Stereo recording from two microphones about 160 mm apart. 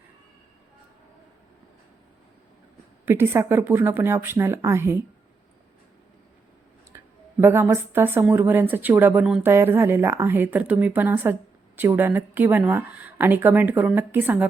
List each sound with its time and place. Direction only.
3.1 s speech: 15° right (ahead or behind)
6.9 s a sound: 20° right (ahead or behind)
7.4 s speech: 15° right (ahead or behind)